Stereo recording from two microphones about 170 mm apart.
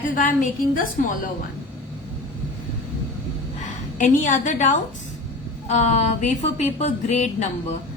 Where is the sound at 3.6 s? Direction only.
50° left (ahead or behind).